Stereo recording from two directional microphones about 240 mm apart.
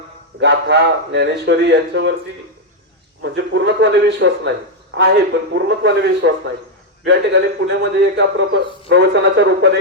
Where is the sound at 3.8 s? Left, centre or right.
Right.